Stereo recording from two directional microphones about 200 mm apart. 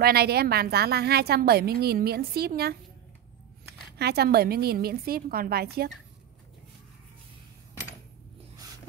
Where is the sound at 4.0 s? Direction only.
55° right (ahead or behind).